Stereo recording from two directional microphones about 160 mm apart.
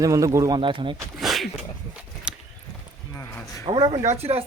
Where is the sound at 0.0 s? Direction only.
20° right (ahead or behind).